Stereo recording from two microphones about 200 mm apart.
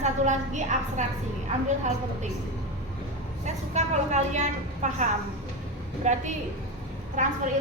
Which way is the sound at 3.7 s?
35° right (ahead or behind).